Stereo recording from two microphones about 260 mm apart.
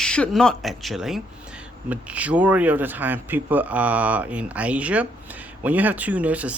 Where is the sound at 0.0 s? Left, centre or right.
Centre.